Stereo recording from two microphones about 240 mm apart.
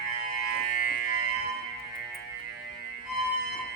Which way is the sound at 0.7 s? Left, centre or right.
Left.